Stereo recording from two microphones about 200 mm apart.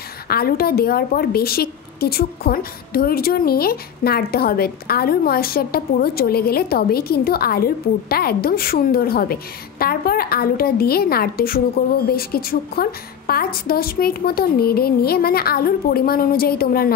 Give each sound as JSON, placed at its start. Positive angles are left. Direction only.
{"t": 0.3, "sound": "a woman's voice", "side_deg": 50}